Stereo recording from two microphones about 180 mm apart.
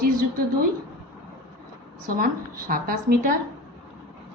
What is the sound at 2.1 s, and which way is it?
Speech, 50° right (ahead or behind).